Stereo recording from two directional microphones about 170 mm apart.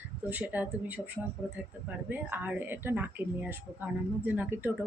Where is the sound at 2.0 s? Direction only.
10° right (ahead or behind).